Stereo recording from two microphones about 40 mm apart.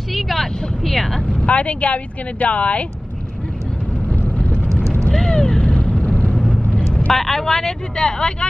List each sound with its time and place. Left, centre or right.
0.1 s vehicle: centre
1.4 s speech: left
5.1 s vehicle: centre
6.0 s vehicle: left
6.3 s vehicle: centre
7.1 s speech: centre